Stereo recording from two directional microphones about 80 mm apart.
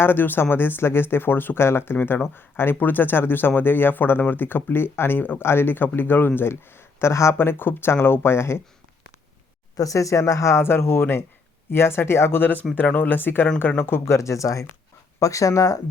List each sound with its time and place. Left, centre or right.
0.0 s speech: left
9.7 s speech: left